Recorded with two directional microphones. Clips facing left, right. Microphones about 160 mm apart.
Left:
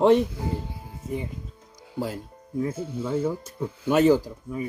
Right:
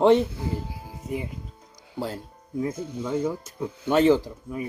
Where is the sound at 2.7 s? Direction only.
10° left (ahead or behind).